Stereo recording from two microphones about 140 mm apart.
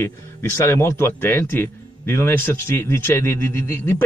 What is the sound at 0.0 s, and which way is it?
Speech, 15° left (ahead or behind).